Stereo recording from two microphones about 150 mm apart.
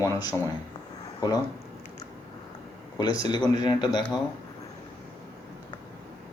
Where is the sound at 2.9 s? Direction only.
25° left (ahead or behind).